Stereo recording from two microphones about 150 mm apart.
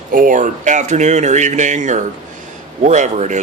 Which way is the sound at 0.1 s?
65° right (ahead or behind).